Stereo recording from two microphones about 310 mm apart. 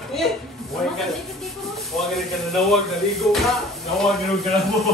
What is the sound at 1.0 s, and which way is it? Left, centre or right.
Speech, centre.